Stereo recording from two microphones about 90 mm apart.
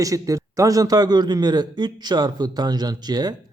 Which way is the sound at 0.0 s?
40° right (ahead or behind).